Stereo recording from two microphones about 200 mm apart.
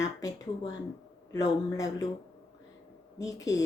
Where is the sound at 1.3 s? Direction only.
20° left (ahead or behind).